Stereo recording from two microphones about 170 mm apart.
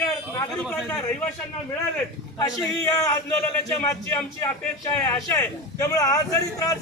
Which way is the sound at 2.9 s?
15° left (ahead or behind).